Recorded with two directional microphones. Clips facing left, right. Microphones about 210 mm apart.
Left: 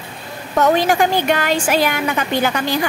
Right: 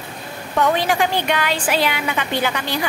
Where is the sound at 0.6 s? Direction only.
45° left (ahead or behind).